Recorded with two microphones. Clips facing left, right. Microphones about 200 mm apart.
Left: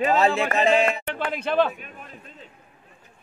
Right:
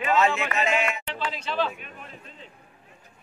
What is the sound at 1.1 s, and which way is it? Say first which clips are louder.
Speech: left 5 dB; 55° left (ahead or behind).